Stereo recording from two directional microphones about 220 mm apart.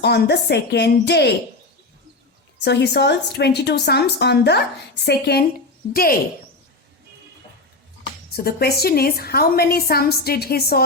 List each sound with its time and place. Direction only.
0.0 s a woman's voice: 50° left (ahead or behind)
2.6 s a woman's voice: 50° left (ahead or behind)
8.4 s a woman's voice: 45° left (ahead or behind)